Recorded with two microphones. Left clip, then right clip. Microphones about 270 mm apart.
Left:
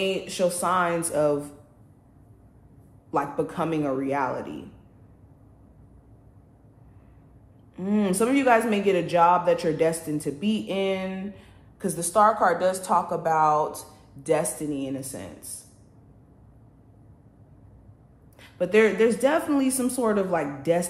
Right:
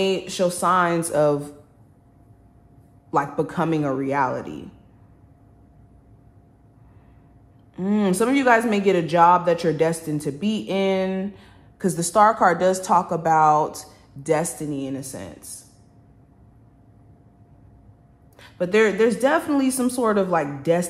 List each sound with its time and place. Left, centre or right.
0.0 s speech: right
3.1 s speech: right
7.7 s speech: right
18.4 s speech: right